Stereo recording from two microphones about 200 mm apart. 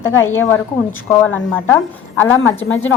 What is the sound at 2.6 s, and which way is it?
Speech, 75° left (ahead or behind).